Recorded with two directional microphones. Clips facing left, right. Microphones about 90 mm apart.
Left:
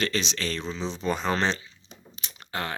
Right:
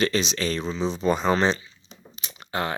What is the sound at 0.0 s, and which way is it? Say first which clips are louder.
Speech: right 5 dB; 10° right (ahead or behind).